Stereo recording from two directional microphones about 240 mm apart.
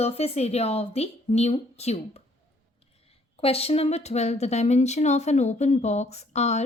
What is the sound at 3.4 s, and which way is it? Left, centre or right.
A woman's voice, left.